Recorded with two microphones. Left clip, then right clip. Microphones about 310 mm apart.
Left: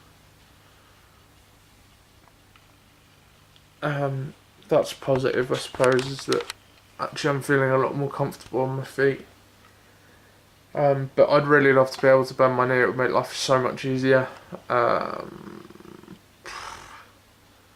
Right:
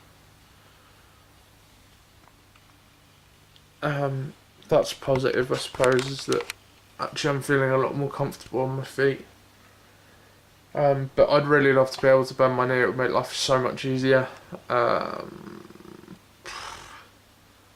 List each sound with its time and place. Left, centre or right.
3.8 s speech: centre
10.7 s speech: centre
16.4 s a sound: centre